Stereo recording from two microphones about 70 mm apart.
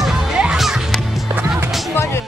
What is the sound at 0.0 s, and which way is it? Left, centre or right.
Music, centre.